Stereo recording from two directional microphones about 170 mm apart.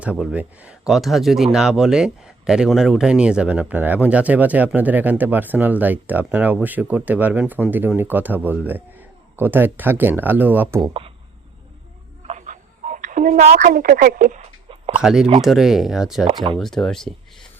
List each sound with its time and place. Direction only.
0.0 s speech: 5° right (ahead or behind)
12.3 s a sound: 45° right (ahead or behind)
13.7 s speech: 60° right (ahead or behind)
14.9 s speech: 5° right (ahead or behind)
16.2 s speech: 30° right (ahead or behind)
16.6 s speech: 5° left (ahead or behind)